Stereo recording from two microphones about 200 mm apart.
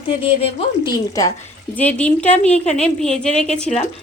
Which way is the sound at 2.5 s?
30° left (ahead or behind).